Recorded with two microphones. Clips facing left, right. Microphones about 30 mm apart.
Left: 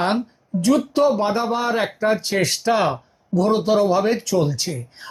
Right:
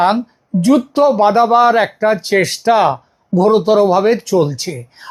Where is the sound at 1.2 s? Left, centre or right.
Right.